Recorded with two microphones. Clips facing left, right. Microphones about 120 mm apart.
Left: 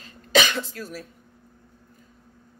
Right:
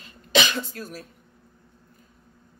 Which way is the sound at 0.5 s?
45° right (ahead or behind).